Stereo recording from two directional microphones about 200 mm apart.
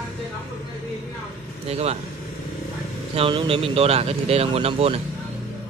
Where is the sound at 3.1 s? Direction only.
25° right (ahead or behind).